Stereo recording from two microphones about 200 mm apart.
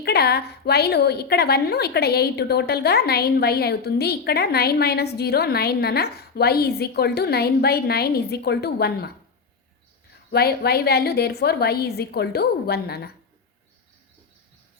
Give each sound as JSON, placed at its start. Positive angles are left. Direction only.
{"t": 0.0, "sound": "a woman's voice", "side_deg": 50}
{"t": 10.3, "sound": "a woman's voice", "side_deg": 50}